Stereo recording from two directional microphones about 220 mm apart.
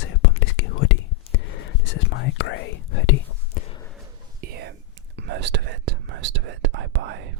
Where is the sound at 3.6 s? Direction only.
40° left (ahead or behind).